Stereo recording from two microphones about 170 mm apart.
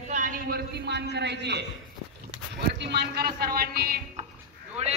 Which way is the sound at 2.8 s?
80° right.